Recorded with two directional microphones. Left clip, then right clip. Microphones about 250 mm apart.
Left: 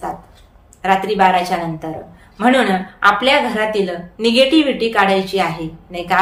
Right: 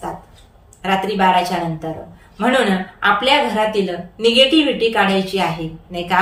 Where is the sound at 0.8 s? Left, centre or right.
Centre.